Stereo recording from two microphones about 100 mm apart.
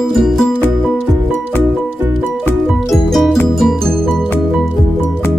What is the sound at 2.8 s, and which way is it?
Music, centre (ahead or behind).